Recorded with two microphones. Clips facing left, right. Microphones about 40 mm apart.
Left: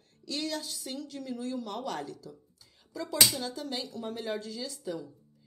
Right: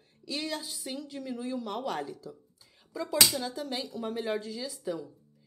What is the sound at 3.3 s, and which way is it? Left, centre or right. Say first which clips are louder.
Speech: right 2 dB; centre.